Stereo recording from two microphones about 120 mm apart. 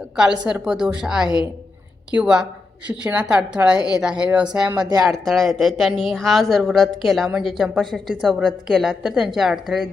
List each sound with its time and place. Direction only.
0.2 s a woman's voice: 5° right (ahead or behind)
3.8 s speech: 35° left (ahead or behind)
4.0 s a woman's voice: 10° right (ahead or behind)
4.9 s speech: 30° right (ahead or behind)
5.1 s speech: centre (ahead or behind)